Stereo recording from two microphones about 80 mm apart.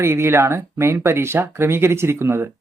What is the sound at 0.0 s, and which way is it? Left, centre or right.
Speech, right.